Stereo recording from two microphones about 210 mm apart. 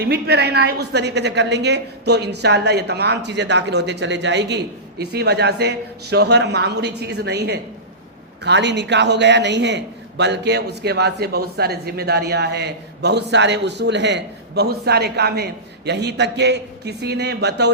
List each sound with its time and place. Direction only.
0.0 s a woman's voice: 50° right (ahead or behind)